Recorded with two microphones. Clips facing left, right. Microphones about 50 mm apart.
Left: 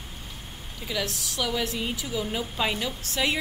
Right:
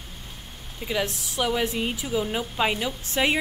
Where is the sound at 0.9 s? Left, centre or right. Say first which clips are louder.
Right 3 dB; right.